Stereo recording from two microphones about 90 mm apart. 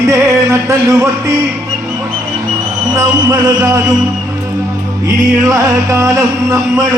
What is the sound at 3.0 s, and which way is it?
Speech, 35° right (ahead or behind).